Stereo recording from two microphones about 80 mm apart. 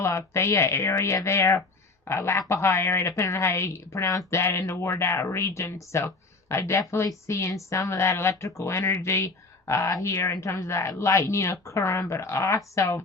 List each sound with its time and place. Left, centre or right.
0.0 s speech: left